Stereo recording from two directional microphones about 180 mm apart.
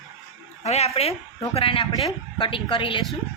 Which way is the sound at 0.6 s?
35° left (ahead or behind).